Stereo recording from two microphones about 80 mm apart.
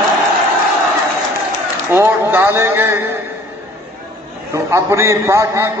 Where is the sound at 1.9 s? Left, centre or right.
Right.